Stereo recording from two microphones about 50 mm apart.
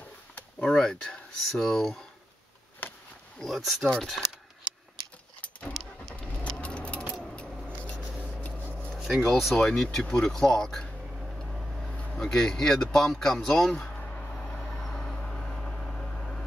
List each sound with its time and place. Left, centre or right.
0.7 s speech: centre
2.8 s a sound: left
3.3 s speech: centre
5.7 s vehicle: centre
6.1 s vehicle: left
7.3 s scissors: left
8.4 s a sound: left
8.9 s speech: centre
10.0 s speech: centre
11.4 s vehicle: centre
11.9 s a sound: left
12.2 s speech: centre
13.1 s a sound: centre
14.6 s vehicle: centre